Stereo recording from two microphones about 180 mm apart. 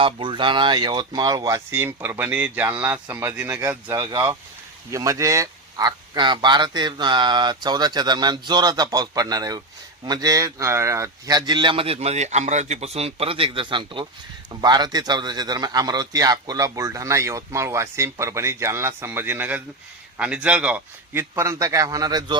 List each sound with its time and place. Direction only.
0.0 s a man's voice: 30° right (ahead or behind)